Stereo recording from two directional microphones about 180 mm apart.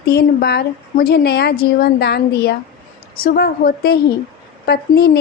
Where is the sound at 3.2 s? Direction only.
55° left (ahead or behind).